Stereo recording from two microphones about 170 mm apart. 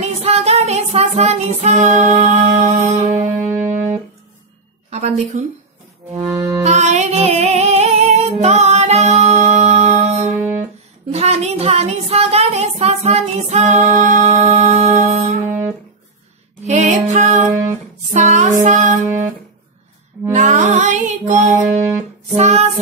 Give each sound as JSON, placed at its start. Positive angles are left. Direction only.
{"t": 0.0, "sound": "music", "side_deg": -40}
{"t": 2.7, "sound": "music", "side_deg": -20}
{"t": 4.9, "sound": "a woman's voice", "side_deg": -40}
{"t": 6.1, "sound": "music", "side_deg": -30}
{"t": 10.2, "sound": "music", "side_deg": -15}
{"t": 11.1, "sound": "a sound", "side_deg": -40}
{"t": 15.4, "sound": "music", "side_deg": -15}
{"t": 16.6, "sound": "music", "side_deg": -40}
{"t": 20.3, "sound": "music", "side_deg": -45}
{"t": 21.5, "sound": "music", "side_deg": -15}
{"t": 22.3, "sound": "music", "side_deg": -40}